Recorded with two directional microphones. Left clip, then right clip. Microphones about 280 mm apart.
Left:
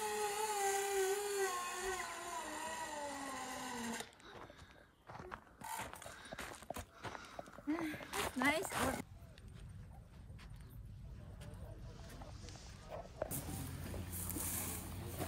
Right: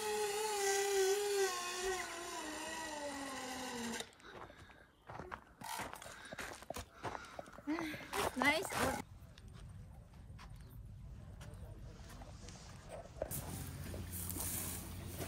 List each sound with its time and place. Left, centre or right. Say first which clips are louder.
0.0 s a sound: right 1 dB; centre
14.1 s boat: even; centre
15.0 s vehicle: left 2 dB; left